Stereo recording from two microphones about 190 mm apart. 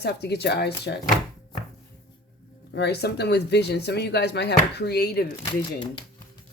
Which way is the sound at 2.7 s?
60° left (ahead or behind).